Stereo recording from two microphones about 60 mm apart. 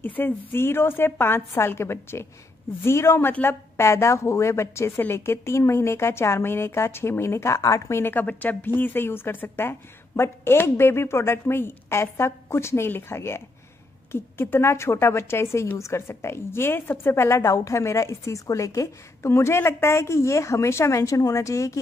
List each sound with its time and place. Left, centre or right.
0.0 s a woman's voice: left
7.6 s a woman's voice: left
7.9 s a woman's voice: left